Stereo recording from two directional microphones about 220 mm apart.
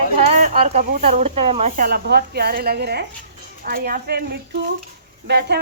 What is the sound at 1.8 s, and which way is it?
Speech, 45° right (ahead or behind).